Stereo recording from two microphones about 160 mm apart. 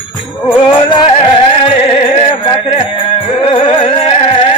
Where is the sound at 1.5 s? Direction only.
35° left (ahead or behind).